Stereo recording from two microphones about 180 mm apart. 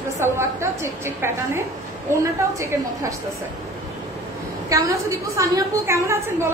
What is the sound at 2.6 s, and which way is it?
Speech, 15° right (ahead or behind).